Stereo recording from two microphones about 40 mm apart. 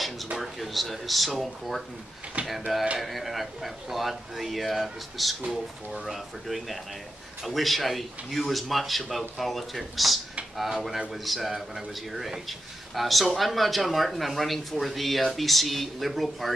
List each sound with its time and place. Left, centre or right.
0.4 s speech: centre
2.4 s a sound: right
3.0 s a man's voice: centre